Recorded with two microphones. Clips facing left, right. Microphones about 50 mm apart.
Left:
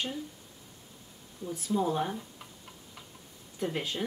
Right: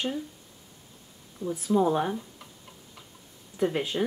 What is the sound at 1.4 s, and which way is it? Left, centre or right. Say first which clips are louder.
Speech: right 6 dB; centre.